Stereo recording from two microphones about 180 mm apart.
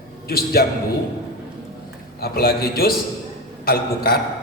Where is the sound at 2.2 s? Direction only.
55° left (ahead or behind).